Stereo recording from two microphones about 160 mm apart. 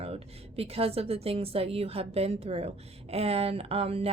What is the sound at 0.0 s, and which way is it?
A woman's voice, 40° right (ahead or behind).